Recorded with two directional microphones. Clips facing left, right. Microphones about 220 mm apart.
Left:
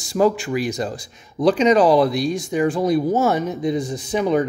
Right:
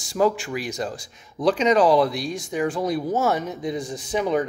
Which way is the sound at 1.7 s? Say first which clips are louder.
Left 3 dB; 35° left (ahead or behind).